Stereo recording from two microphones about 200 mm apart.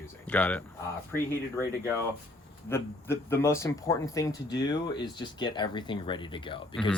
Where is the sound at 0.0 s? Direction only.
5° left (ahead or behind).